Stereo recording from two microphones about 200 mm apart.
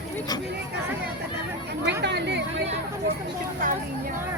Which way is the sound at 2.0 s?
60° right (ahead or behind).